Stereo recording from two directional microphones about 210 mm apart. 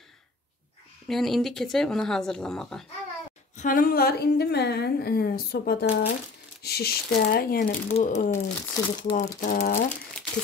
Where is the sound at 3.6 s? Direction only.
40° left (ahead or behind).